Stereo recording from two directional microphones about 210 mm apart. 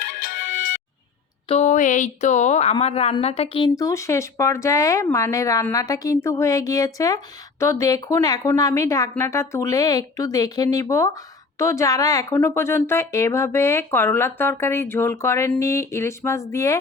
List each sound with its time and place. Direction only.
0.0 s music: 40° left (ahead or behind)
1.5 s a woman's voice: 35° left (ahead or behind); by 16.7 s 15° left (ahead or behind)